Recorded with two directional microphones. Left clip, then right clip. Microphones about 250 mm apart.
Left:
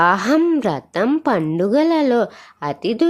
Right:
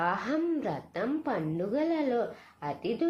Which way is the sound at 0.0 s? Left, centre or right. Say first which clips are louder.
Left 15 dB; left.